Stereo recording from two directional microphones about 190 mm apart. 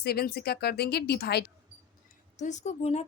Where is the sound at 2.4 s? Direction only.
40° left (ahead or behind).